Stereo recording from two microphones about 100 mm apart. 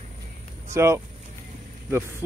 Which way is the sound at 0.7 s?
30° right (ahead or behind).